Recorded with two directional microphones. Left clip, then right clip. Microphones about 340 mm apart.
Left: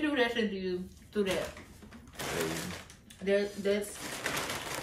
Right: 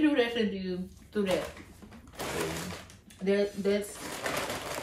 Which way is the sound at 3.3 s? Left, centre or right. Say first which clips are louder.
Right 1 dB; centre.